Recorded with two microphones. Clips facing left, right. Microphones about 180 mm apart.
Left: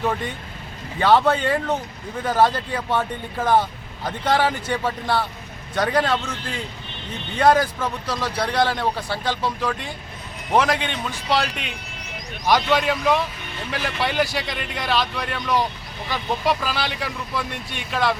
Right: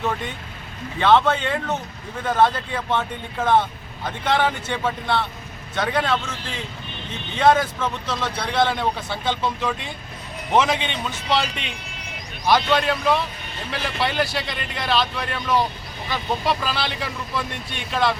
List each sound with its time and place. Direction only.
0.9 s speech: 10° left (ahead or behind)
10.5 s speech: 10° left (ahead or behind)